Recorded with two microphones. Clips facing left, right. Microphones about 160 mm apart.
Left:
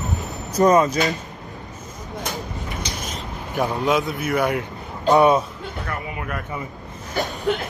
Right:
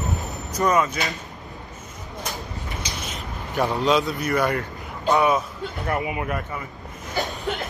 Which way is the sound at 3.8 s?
20° left (ahead or behind).